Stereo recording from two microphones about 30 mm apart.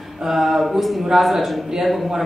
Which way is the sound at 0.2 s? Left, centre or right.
Centre.